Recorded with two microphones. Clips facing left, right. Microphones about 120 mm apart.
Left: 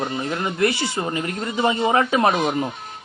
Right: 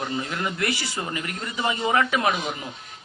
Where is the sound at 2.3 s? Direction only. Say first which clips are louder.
Left 8 dB; 60° left (ahead or behind).